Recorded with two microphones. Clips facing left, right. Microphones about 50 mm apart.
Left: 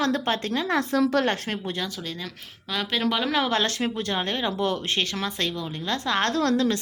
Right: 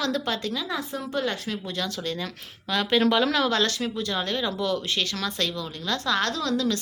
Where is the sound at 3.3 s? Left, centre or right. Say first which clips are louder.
Even; left.